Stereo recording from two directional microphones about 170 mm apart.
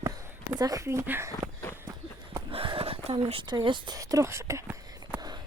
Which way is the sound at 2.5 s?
35° right (ahead or behind).